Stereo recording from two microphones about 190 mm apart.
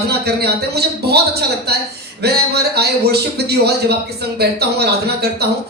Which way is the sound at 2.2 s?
60° right (ahead or behind).